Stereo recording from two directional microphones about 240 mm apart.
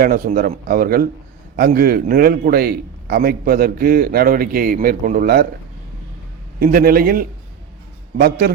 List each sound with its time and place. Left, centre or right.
0.0 s a man's voice: right
6.6 s a man's voice: right